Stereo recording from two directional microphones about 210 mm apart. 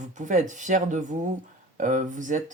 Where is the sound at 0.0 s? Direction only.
35° right (ahead or behind).